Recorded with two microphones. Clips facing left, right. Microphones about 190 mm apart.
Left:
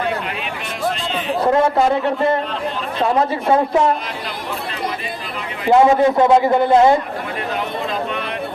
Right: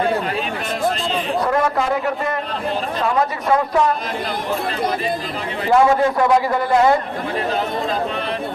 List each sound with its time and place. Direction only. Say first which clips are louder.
1.5 s a man's voice: left 6 dB; 25° left (ahead or behind)
5.6 s a man's voice: left 3 dB; 20° left (ahead or behind)